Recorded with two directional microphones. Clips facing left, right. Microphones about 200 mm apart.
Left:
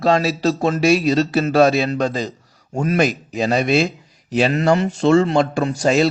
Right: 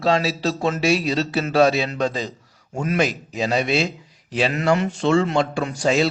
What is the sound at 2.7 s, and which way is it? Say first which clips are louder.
Speech: left 4 dB; 35° left (ahead or behind).